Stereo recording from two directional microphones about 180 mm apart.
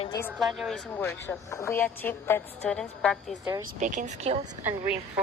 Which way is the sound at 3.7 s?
45° right (ahead or behind).